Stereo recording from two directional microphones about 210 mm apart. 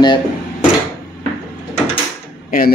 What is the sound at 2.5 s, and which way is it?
Speech, 45° left (ahead or behind).